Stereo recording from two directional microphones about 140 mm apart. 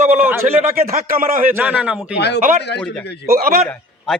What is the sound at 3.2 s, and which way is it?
Speech, 90° right.